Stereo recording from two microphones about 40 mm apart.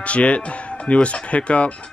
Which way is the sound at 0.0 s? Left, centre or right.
Left.